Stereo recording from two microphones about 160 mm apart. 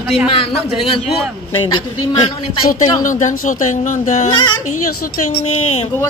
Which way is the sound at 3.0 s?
50° left (ahead or behind).